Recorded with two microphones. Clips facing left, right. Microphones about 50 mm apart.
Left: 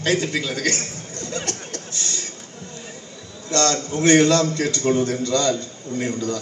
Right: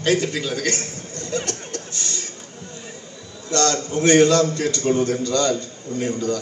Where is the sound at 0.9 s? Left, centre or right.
Right.